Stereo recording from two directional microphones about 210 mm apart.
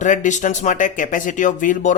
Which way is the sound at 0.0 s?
35° left (ahead or behind).